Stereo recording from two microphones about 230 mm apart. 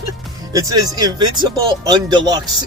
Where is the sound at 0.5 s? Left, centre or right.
Centre.